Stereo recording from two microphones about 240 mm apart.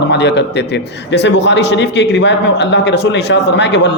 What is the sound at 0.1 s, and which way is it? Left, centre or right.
A man's voice, left.